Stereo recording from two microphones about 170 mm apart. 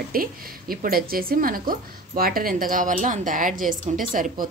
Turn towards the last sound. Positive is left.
turn(degrees=-50)  # may be behind; listen again after turning